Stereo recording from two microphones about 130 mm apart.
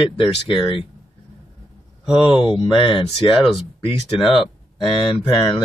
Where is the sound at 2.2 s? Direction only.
35° left (ahead or behind).